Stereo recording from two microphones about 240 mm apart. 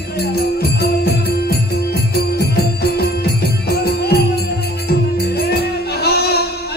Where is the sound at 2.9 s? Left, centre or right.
Left.